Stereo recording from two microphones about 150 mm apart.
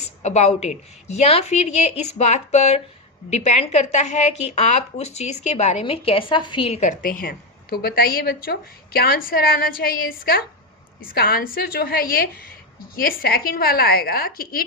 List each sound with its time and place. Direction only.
0.2 s a woman's voice: 50° left (ahead or behind); by 14.6 s 85° left